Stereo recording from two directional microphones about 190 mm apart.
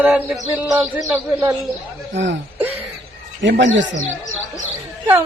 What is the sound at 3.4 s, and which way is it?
Speech, 70° right (ahead or behind).